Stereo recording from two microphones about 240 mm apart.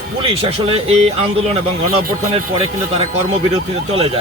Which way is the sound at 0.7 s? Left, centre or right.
Right.